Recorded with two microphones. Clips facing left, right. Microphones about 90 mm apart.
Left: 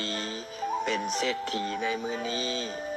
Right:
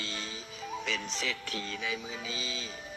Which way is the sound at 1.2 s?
35° left (ahead or behind).